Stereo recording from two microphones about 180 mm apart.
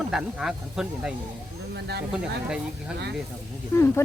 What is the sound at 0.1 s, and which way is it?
Speech, 5° right (ahead or behind).